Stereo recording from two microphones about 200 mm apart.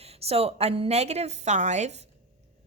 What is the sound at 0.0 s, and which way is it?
A woman's voice, 30° right (ahead or behind).